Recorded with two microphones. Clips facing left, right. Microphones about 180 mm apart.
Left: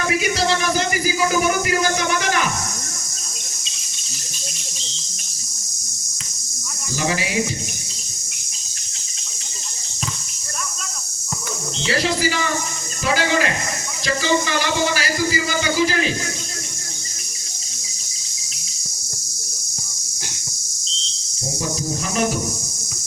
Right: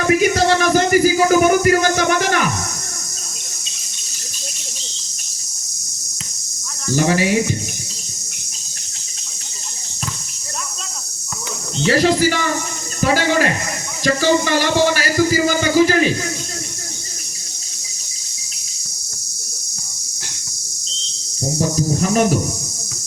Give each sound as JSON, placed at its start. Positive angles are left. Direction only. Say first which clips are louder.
{"t": 0.1, "sound": "music", "louder": "right 7 dB", "side_deg": -45}
{"t": 6.9, "sound": "speech", "louder": "right 7 dB", "side_deg": -45}
{"t": 11.9, "sound": "speech", "louder": "right 6 dB", "side_deg": -45}